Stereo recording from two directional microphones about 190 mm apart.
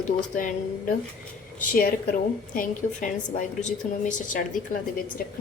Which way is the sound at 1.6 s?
50° left (ahead or behind).